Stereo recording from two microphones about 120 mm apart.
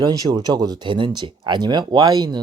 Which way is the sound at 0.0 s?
35° right (ahead or behind).